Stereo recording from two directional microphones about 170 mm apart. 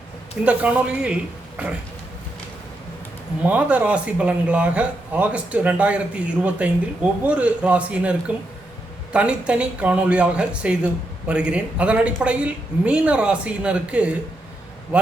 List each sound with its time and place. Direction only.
0.4 s speech: 10° right (ahead or behind)
3.4 s speech: 10° right (ahead or behind)
9.1 s speech: 5° right (ahead or behind)